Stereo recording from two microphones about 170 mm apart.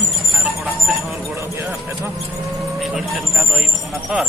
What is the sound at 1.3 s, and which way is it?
Speech, 15° right (ahead or behind).